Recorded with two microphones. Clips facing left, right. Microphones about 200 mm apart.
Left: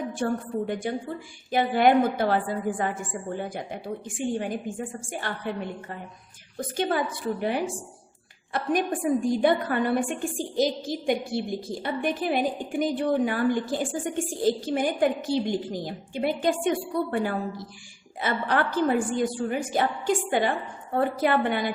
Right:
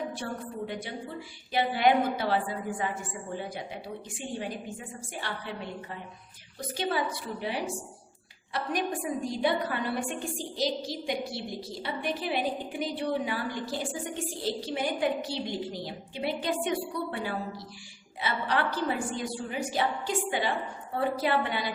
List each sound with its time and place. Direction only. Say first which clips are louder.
0.7 s a woman's voice: left 7 dB; 50° left (ahead or behind)
20.9 s a woman's voice: left 4 dB; 50° left (ahead or behind)